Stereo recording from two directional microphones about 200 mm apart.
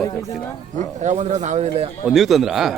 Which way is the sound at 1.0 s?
35° right (ahead or behind).